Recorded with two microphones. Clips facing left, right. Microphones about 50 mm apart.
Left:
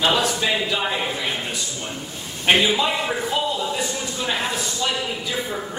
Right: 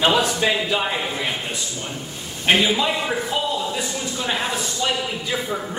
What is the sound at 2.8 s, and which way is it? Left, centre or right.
Speech, centre.